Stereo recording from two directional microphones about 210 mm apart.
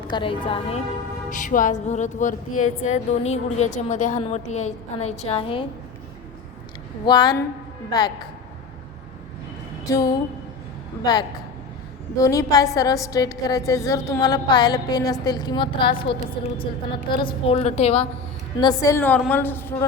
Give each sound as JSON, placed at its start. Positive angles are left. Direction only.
{"t": 0.1, "sound": "a woman's voice", "side_deg": 25}
{"t": 1.3, "sound": "a woman's voice", "side_deg": 40}
{"t": 7.0, "sound": "a woman's voice", "side_deg": 20}
{"t": 9.9, "sound": "a woman's voice", "side_deg": 20}
{"t": 18.6, "sound": "a woman's voice", "side_deg": 15}